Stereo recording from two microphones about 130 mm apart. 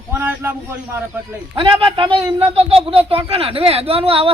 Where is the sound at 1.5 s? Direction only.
40° right (ahead or behind).